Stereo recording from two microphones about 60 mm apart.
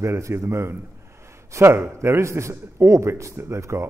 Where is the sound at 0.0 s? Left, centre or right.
Right.